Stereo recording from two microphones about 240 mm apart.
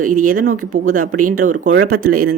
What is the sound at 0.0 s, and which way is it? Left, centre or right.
Speech, right.